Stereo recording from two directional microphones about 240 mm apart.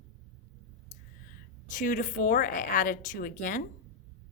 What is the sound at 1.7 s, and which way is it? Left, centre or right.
A woman's voice, left.